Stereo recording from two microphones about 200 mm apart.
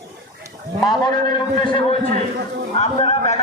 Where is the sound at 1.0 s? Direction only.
25° left (ahead or behind).